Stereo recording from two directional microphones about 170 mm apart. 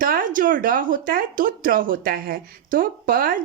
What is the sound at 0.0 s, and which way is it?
A woman's voice, 55° right (ahead or behind).